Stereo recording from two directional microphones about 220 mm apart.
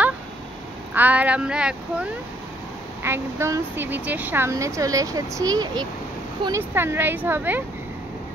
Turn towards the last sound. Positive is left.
turn(degrees=-10)  # may be behind; listen again after turning